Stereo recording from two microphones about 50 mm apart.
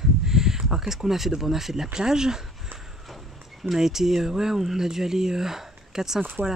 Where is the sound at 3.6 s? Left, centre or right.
Centre.